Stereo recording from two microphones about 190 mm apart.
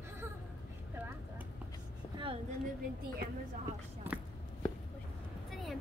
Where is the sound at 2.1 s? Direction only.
30° right (ahead or behind).